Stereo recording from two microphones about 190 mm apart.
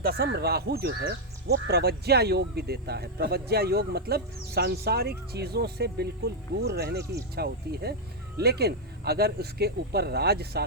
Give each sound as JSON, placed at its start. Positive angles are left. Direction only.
{"t": 0.0, "sound": "speech", "side_deg": -55}